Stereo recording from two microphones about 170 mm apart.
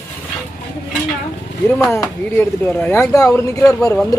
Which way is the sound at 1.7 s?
15° left (ahead or behind).